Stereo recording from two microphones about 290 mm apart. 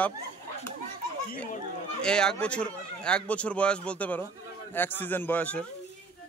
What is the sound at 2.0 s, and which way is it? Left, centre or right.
A man's voice, centre.